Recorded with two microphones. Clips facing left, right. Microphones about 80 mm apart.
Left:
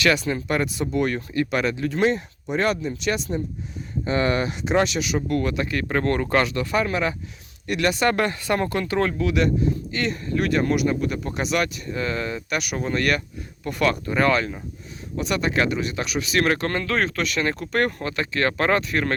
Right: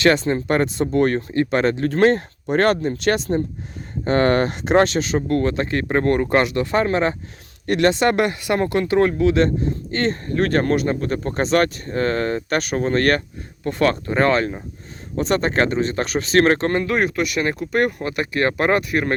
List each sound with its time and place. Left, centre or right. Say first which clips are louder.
0.0 s speech: right 5 dB; right
1.7 s speech: right 5 dB; right
16.6 s speech: right 4 dB; right